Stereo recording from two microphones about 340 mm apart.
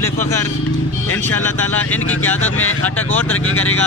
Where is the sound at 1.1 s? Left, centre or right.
Centre.